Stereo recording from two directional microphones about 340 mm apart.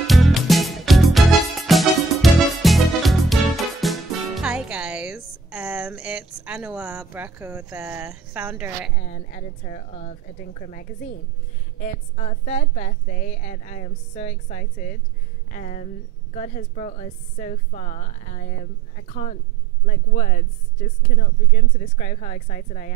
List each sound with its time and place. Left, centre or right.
0.0 s music: centre
8.9 s a woman's voice: left